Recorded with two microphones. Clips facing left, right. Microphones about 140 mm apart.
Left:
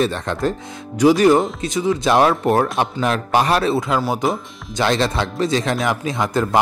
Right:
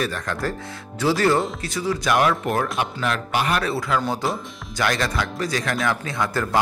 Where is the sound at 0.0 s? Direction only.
25° left (ahead or behind).